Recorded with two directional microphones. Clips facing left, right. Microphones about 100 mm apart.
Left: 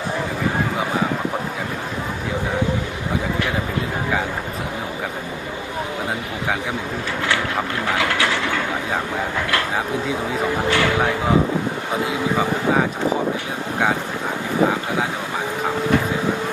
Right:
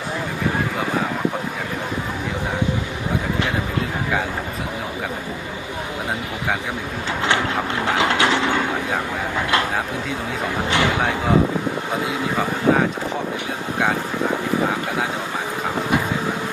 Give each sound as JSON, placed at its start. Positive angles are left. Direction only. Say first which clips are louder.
{"t": 7.9, "sound": "mechanisms", "louder": "right 3 dB", "side_deg": -20}
{"t": 10.7, "sound": "speech", "louder": "even", "side_deg": -20}
{"t": 12.0, "sound": "speech", "louder": "left 4 dB", "side_deg": 0}